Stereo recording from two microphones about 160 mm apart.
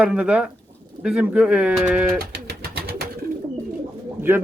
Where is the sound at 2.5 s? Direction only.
75° right (ahead or behind).